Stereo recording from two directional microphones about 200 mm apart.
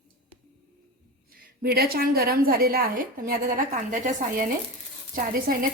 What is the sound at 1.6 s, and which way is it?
A woman's voice, 50° right (ahead or behind).